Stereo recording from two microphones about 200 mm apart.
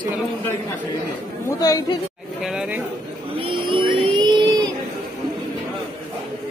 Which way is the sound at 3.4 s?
25° right (ahead or behind).